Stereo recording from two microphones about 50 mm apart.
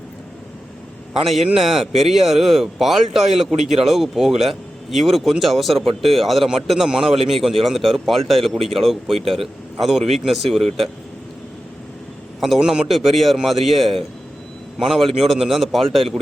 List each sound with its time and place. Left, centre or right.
1.5 s a man's voice: centre
12.5 s a man's voice: centre
12.9 s a man's voice: centre